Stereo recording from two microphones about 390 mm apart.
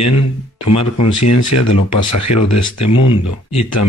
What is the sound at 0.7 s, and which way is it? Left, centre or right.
Speech, left.